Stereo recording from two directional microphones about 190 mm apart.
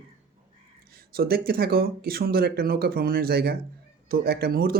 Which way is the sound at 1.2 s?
55° right (ahead or behind).